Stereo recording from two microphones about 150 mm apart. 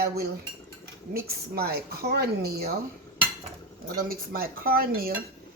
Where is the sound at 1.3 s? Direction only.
90° right.